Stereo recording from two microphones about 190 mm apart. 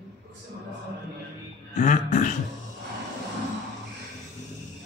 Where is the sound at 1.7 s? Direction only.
40° left (ahead or behind).